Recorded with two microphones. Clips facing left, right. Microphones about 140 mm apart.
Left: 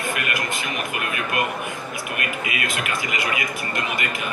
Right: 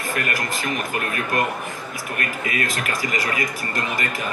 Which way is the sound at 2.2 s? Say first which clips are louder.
Right 4 dB; 40° right (ahead or behind).